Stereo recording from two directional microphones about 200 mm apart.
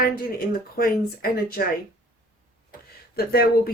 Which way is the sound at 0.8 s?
45° left (ahead or behind).